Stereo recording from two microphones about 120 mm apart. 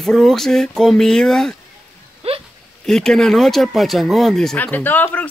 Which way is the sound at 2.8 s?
5° left (ahead or behind).